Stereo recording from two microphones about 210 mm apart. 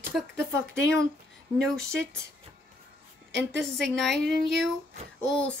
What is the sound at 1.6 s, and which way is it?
Speech, 5° left (ahead or behind).